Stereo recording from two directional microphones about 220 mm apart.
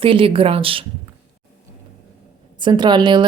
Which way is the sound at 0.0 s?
25° right (ahead or behind).